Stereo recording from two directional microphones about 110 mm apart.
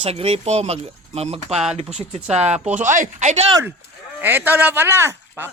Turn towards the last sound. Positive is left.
turn(degrees=-20)  # may be behind; listen again after turning